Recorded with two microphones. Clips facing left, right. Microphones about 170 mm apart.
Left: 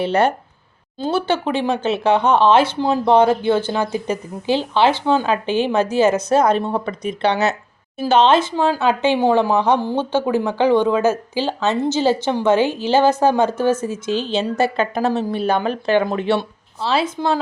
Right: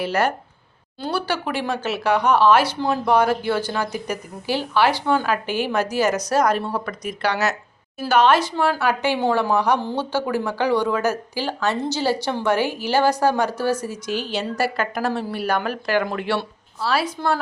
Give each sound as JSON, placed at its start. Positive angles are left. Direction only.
{"t": 0.0, "sound": "speech", "side_deg": 25}